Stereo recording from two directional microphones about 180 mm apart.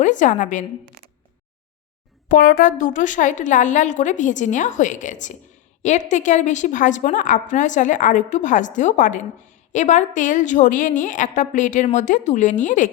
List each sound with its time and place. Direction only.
0.0 s a woman's voice: 45° left (ahead or behind)
2.3 s a woman's voice: 50° left (ahead or behind)